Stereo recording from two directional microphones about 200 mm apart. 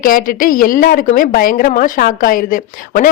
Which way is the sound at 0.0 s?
45° left (ahead or behind).